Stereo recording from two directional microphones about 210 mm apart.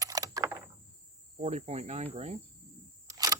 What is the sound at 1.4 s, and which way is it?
Cricket, 30° right (ahead or behind).